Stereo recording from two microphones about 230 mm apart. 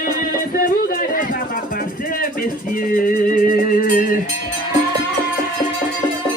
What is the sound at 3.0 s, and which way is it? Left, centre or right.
Music, left.